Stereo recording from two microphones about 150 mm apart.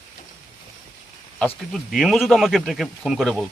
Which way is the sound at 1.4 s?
5° left (ahead or behind).